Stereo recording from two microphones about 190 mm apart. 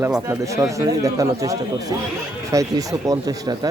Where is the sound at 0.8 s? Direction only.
20° right (ahead or behind).